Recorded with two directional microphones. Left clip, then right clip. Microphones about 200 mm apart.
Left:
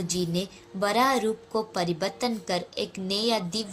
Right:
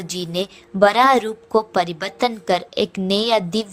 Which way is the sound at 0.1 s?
45° right (ahead or behind).